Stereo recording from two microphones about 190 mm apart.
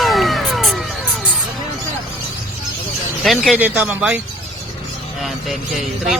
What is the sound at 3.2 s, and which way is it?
Speech, centre (ahead or behind).